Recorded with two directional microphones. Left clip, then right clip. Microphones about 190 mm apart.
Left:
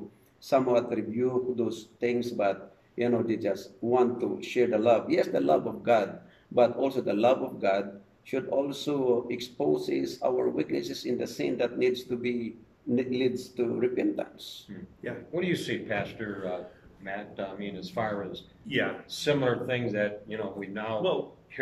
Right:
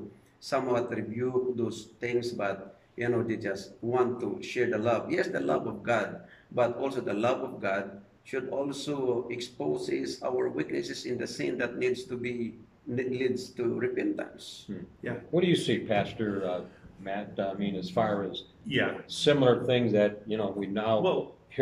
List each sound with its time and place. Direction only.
0.5 s speech: 15° left (ahead or behind)
15.0 s speech: centre (ahead or behind)
15.3 s speech: 15° right (ahead or behind)
18.7 s speech: centre (ahead or behind)
19.0 s speech: 15° right (ahead or behind)